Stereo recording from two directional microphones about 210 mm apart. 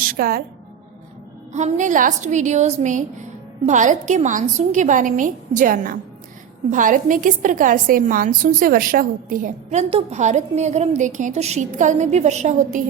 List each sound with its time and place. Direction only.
0.0 s a woman's voice: 45° right (ahead or behind)
1.5 s a woman's voice: 35° right (ahead or behind)